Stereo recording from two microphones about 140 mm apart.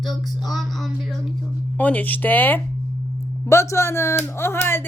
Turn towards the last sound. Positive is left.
turn(degrees=15)  # may be behind; listen again after turning